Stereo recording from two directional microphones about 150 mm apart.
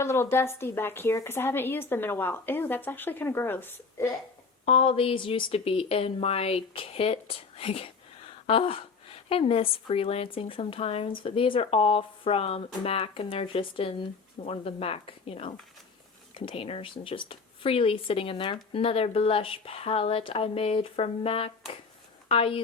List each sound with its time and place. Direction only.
0.0 s a woman's voice: 15° left (ahead or behind)
4.6 s speech: 40° left (ahead or behind)